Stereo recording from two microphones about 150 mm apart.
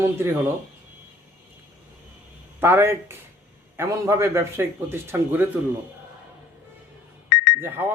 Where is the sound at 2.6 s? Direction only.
15° right (ahead or behind).